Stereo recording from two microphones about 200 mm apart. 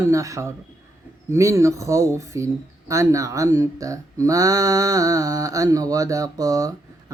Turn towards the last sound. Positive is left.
turn(degrees=-15)  # may be behind; listen again after turning